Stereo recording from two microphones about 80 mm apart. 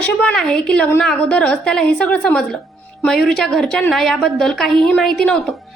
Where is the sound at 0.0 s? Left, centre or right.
Centre.